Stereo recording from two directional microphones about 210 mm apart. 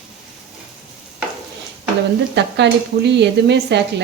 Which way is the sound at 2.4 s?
55° right (ahead or behind).